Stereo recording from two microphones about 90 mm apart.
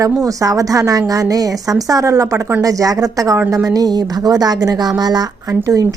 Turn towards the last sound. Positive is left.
turn(degrees=-35)  # may be behind; listen again after turning